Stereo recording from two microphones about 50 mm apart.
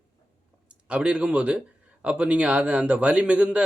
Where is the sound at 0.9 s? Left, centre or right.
Centre.